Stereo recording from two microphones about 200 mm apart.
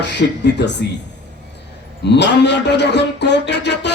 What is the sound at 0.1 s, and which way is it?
Speech, 60° left (ahead or behind).